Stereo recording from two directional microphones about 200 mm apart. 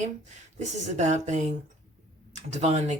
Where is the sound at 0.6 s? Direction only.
35° right (ahead or behind).